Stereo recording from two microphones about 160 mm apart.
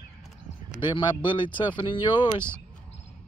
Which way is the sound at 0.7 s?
30° left (ahead or behind).